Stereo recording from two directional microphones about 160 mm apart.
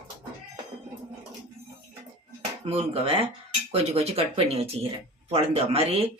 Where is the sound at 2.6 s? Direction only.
40° right (ahead or behind).